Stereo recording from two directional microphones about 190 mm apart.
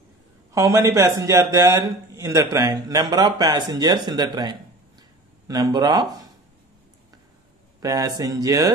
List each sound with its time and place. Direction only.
0.5 s a man's voice: 15° right (ahead or behind)
7.8 s a man's voice: 20° right (ahead or behind)